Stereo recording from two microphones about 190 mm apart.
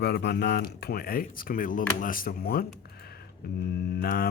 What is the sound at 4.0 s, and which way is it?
Speech, 50° left (ahead or behind).